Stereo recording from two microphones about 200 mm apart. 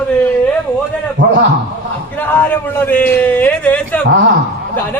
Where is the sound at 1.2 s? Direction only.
65° right (ahead or behind).